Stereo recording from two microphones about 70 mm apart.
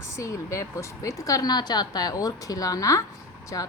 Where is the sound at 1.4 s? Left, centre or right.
Left.